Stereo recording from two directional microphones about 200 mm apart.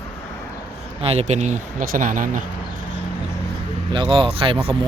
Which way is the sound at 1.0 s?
35° right (ahead or behind).